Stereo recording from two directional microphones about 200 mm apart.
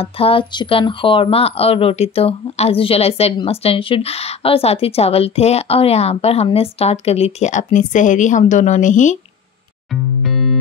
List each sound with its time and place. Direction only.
0.0 s speech: 30° left (ahead or behind)
10.2 s music: centre (ahead or behind)